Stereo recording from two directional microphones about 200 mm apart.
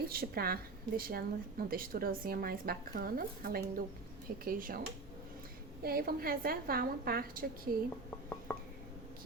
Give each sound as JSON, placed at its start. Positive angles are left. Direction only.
{"t": 0.1, "sound": "a woman's voice", "side_deg": -50}
{"t": 5.8, "sound": "a woman's voice", "side_deg": -50}
{"t": 8.5, "sound": "a sound", "side_deg": 5}